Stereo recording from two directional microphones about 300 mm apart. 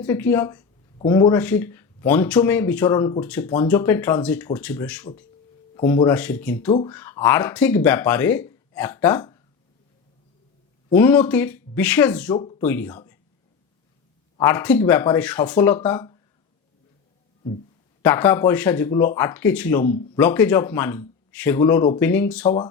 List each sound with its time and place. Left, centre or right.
0.0 s speech: centre
6.7 s speech: centre
6.9 s speech: centre
10.9 s speech: centre
14.3 s speech: centre
18.0 s speech: centre
22.4 s speech: left